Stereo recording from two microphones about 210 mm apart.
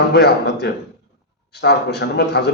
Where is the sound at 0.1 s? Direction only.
50° left (ahead or behind).